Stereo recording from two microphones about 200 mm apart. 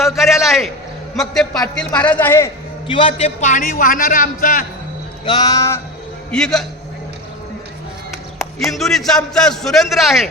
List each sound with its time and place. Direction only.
0.0 s a sound: centre (ahead or behind)
1.1 s a man's voice: centre (ahead or behind)
2.8 s a man's voice: 25° left (ahead or behind); by 4.6 s 45° left (ahead or behind)
5.2 s a woman's voice: 20° left (ahead or behind)
6.3 s a man's voice: 5° left (ahead or behind)
8.7 s a man's voice: centre (ahead or behind)